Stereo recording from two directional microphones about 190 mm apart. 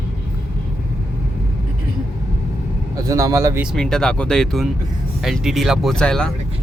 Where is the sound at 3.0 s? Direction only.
15° right (ahead or behind).